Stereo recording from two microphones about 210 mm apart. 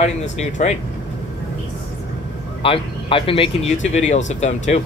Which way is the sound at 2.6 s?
25° left (ahead or behind).